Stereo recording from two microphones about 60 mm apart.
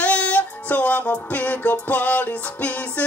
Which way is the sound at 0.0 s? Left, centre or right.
Left.